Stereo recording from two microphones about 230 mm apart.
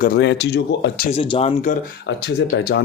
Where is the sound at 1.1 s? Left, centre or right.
Left.